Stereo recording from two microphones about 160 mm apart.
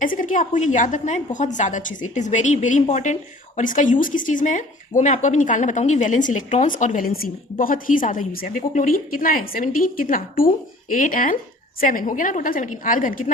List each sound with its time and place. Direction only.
0.0 s a woman's voice: 55° left (ahead or behind)